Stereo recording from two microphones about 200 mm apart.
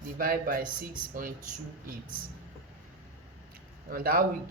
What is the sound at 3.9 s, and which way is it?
Speech, 45° right (ahead or behind).